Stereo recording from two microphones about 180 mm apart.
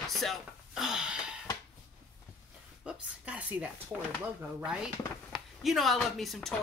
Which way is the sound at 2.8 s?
5° right (ahead or behind).